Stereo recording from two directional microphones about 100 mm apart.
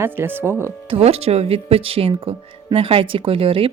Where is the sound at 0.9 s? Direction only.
85° right; by 3.7 s 70° right (ahead or behind).